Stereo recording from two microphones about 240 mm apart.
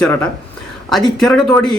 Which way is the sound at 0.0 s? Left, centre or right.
Centre.